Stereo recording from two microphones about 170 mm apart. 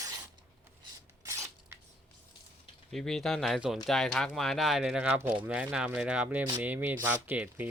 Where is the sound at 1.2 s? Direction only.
15° right (ahead or behind).